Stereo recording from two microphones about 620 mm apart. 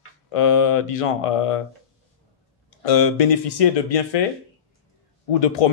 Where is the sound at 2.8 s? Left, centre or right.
Left.